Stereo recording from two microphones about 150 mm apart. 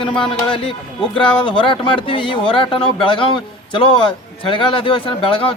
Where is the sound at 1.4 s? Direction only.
35° left (ahead or behind).